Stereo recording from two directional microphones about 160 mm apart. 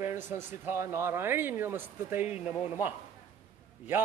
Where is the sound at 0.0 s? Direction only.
15° right (ahead or behind).